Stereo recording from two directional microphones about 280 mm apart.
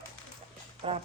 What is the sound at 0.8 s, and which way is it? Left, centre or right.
Speech, centre.